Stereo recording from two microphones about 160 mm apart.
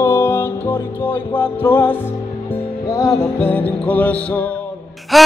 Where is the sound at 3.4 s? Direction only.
10° left (ahead or behind).